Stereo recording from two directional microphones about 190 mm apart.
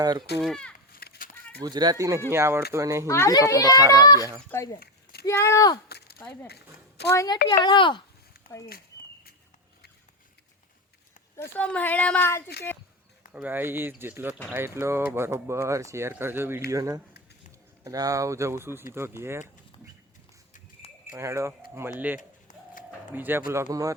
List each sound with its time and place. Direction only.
0.0 s speech: 20° right (ahead or behind)
0.4 s speech: 5° left (ahead or behind)
0.9 s a sound: 55° left (ahead or behind)
1.6 s speech: 20° right (ahead or behind)
3.1 s a woman's voice: 15° left (ahead or behind)
4.2 s speech: 15° right (ahead or behind)
5.2 s a woman's voice: 15° left (ahead or behind)
6.5 s a child's voice: 60° left (ahead or behind)
7.4 s speech: 25° left (ahead or behind)
11.3 s a woman's voice: 10° left (ahead or behind)
13.3 s speech: 10° right (ahead or behind)
21.1 s speech: 15° right (ahead or behind)
22.2 s bird: 40° left (ahead or behind)
23.1 s speech: 10° right (ahead or behind)